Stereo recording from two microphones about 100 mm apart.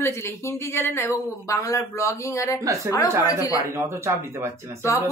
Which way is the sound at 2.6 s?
30° right (ahead or behind).